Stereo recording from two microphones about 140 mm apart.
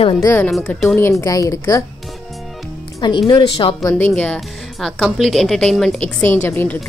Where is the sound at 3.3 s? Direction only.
30° left (ahead or behind).